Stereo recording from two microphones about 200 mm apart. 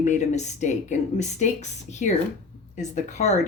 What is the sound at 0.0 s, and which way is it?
A woman's voice, 35° left (ahead or behind).